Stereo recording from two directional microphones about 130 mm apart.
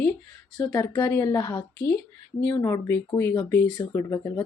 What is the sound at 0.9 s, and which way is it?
Speech, 15° left (ahead or behind).